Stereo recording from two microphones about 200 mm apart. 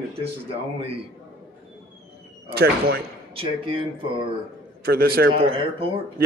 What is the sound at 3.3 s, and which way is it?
Speech, 30° right (ahead or behind).